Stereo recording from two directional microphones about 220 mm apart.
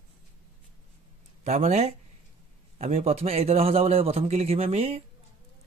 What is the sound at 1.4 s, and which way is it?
A man's voice, 30° right (ahead or behind).